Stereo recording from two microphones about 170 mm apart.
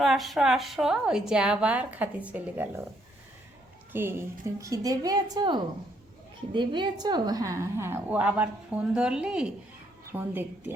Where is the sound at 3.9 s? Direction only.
15° right (ahead or behind).